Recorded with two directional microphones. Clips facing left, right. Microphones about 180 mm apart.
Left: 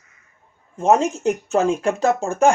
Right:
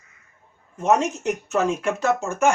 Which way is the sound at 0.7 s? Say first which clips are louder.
Left 3 dB; 30° left (ahead or behind).